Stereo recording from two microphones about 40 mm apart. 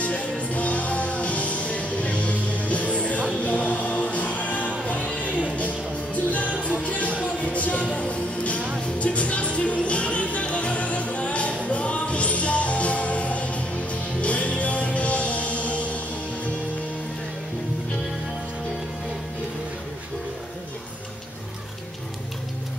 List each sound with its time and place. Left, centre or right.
0.0 s music: left
6.3 s music: left